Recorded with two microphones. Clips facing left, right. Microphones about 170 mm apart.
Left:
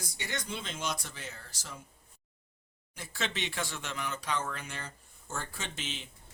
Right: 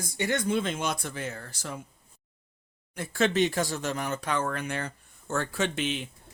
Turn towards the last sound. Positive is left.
turn(degrees=-60)  # may be behind; listen again after turning